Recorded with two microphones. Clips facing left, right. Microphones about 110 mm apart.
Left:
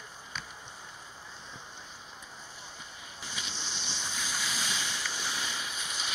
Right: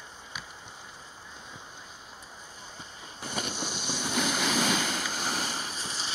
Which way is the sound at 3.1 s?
50° right (ahead or behind).